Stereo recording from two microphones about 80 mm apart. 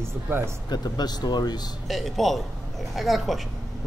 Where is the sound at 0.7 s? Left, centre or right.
Left.